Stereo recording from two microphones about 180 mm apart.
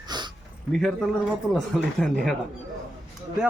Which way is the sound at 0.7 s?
Centre (ahead or behind).